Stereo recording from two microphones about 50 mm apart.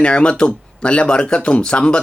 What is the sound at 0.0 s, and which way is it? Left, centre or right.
Speech, left.